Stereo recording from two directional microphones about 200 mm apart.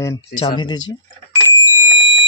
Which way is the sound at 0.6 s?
20° left (ahead or behind).